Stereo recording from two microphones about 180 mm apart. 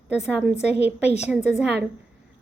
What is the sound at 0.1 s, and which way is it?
A woman's voice, 10° right (ahead or behind).